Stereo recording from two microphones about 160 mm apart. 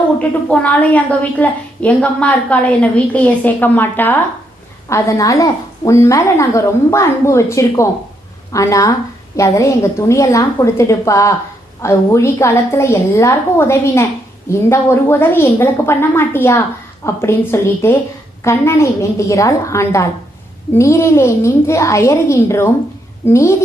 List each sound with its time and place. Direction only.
0.2 s a woman's voice: 10° left (ahead or behind)